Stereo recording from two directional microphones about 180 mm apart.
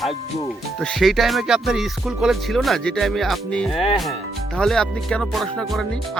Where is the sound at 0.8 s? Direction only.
5° left (ahead or behind).